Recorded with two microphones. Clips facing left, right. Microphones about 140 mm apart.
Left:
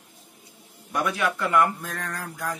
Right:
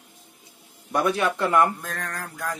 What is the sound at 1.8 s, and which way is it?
Mantra, 10° left (ahead or behind).